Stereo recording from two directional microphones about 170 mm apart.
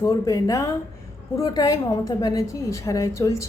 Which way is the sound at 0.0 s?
20° left (ahead or behind).